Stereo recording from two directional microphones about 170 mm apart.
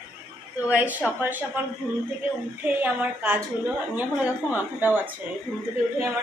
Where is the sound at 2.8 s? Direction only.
10° right (ahead or behind).